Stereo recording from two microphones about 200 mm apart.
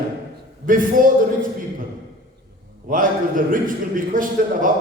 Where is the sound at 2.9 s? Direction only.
40° right (ahead or behind).